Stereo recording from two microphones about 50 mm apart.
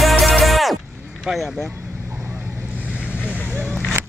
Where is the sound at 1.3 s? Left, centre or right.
Centre.